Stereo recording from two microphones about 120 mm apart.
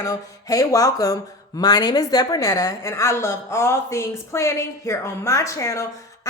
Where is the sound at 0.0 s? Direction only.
30° left (ahead or behind).